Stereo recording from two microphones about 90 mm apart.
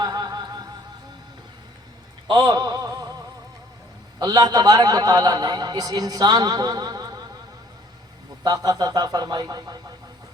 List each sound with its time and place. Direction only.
0.0 s music: 50° right (ahead or behind)
2.3 s a sound: 50° right (ahead or behind)
4.2 s a man's voice: 50° right (ahead or behind)
8.4 s a man's voice: 45° right (ahead or behind)